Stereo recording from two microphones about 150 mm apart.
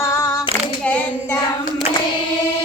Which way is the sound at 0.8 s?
10° left (ahead or behind).